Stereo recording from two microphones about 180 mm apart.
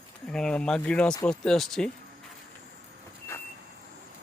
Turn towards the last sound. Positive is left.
turn(degrees=15)  # may be behind; listen again after turning